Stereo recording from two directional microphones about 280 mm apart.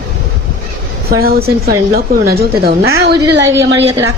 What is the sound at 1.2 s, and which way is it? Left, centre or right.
A man's voice, right.